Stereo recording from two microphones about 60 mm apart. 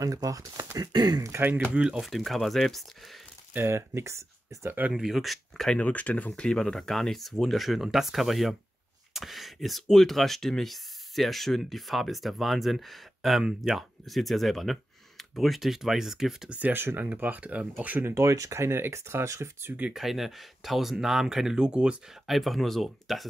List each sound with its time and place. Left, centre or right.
0.0 s speech: right
1.4 s speech: right
1.7 s speech: centre
2.0 s speech: centre
3.6 s speech: right
4.6 s speech: right
4.9 s speech: centre
5.8 s speech: left
6.4 s speech: centre
16.4 s speech: right
16.7 s speech: right
18.0 s speech: right
19.9 s speech: centre
22.2 s speech: centre